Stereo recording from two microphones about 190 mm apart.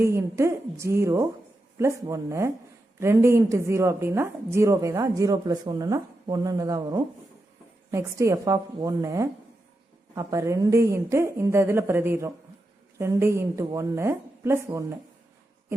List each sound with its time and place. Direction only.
0.0 s a woman's voice: 15° right (ahead or behind)